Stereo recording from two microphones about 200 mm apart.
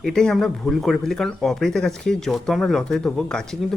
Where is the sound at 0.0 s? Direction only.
5° left (ahead or behind).